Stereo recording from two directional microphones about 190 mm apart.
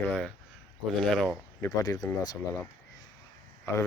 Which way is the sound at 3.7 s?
15° left (ahead or behind).